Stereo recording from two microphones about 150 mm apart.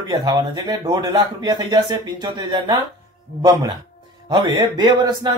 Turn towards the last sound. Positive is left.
turn(degrees=-25)  # may be behind; listen again after turning